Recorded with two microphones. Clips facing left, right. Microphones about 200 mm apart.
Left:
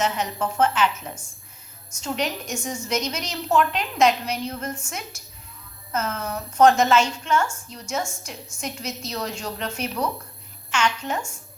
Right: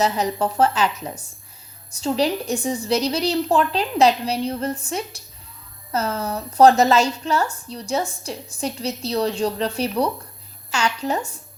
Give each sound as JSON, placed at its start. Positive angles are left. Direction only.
{"t": 0.0, "sound": "a woman's voice", "side_deg": -35}